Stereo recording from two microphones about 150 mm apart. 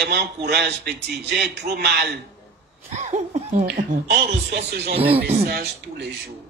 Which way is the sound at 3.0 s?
50° right (ahead or behind).